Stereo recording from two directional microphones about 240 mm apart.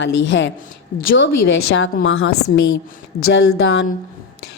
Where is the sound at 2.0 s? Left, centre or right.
Left.